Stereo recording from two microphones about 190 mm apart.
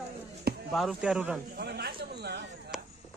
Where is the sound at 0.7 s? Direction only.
Centre (ahead or behind).